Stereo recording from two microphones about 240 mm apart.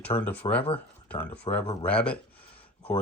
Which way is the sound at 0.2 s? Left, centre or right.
Centre.